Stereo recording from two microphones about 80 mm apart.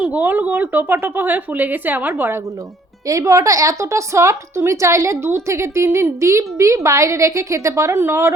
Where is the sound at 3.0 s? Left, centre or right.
Right.